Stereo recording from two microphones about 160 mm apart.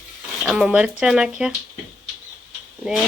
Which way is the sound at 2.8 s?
Centre (ahead or behind).